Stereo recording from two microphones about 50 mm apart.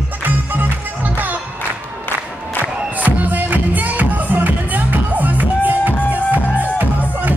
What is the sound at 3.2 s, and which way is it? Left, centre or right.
Music, right.